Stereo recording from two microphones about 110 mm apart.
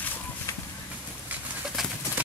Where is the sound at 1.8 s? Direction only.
5° right (ahead or behind).